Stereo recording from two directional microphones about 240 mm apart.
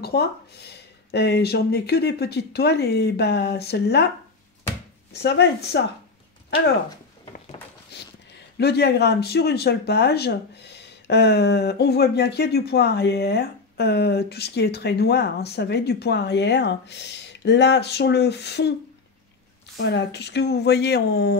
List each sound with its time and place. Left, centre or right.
0.0 s speech: left
5.1 s speech: left
7.9 s a sound: left
8.5 s speech: left
19.8 s speech: left